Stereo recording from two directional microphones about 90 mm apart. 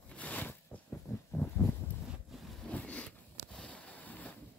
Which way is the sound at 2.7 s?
15° left (ahead or behind).